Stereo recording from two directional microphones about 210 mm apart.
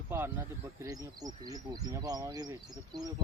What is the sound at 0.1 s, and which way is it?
Speech, 10° right (ahead or behind).